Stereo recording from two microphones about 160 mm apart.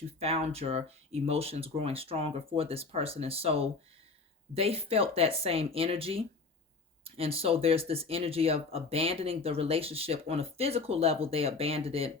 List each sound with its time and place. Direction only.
0.2 s speech: 40° right (ahead or behind)